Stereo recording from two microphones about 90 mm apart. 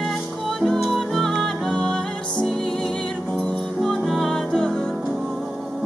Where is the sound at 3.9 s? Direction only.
5° left (ahead or behind).